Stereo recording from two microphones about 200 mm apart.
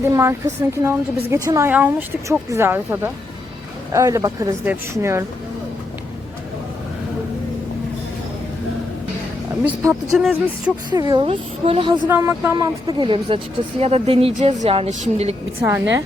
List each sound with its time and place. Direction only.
0.0 s a woman's voice: 15° right (ahead or behind)
9.6 s a woman's voice: 10° right (ahead or behind)
10.9 s speech: 20° right (ahead or behind)
12.0 s speech: 10° right (ahead or behind); by 14.9 s 30° right (ahead or behind)
15.6 s a woman's voice: 10° right (ahead or behind)